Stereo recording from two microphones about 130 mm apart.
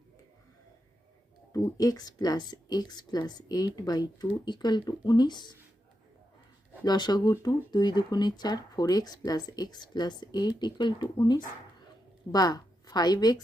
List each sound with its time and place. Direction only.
1.5 s a woman's voice: 30° left (ahead or behind)
6.8 s a woman's voice: 35° left (ahead or behind)